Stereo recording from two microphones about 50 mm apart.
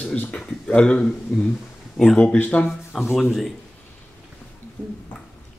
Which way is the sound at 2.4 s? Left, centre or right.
Left.